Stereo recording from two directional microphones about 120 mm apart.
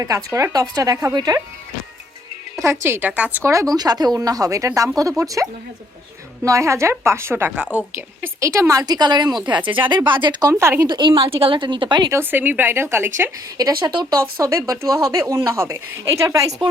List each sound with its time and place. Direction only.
0.0 s speech: 25° right (ahead or behind)
2.6 s speech: 20° right (ahead or behind)
3.4 s speech: 25° right (ahead or behind)
10.5 s speech: 20° right (ahead or behind)
10.8 s speech: 40° right (ahead or behind)
12.1 s speech: 15° right (ahead or behind)
13.6 s speech: 35° right (ahead or behind)